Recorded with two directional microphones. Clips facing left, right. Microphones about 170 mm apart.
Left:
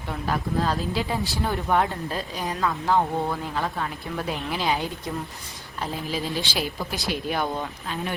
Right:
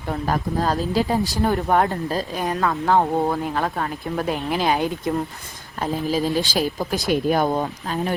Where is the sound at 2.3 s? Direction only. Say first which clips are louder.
Right 3 dB; 55° right (ahead or behind).